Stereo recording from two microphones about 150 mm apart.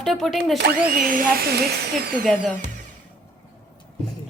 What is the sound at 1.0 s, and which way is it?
Speech, 65° right (ahead or behind).